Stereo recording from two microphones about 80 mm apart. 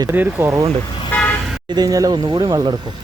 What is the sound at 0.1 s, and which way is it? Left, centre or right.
Speech, right.